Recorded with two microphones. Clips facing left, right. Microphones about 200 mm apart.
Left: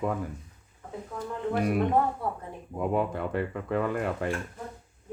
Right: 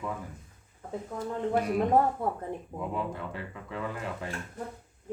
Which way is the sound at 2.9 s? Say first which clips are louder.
Left 8 dB; 60° left (ahead or behind).